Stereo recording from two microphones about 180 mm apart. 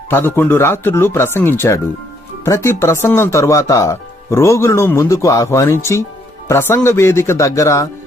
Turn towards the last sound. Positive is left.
turn(degrees=15)  # may be behind; listen again after turning